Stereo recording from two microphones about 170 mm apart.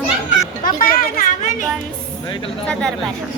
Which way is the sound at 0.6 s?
60° left (ahead or behind).